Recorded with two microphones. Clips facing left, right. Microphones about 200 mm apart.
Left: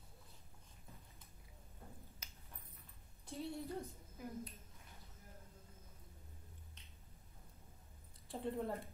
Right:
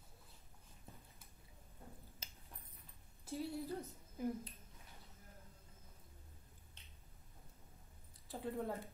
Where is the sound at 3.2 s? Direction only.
5° right (ahead or behind).